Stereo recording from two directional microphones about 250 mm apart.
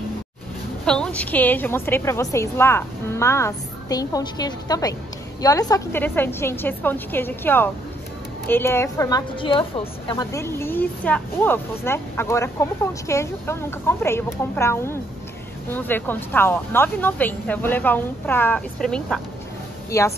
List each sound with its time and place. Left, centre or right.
0.8 s a woman's voice: centre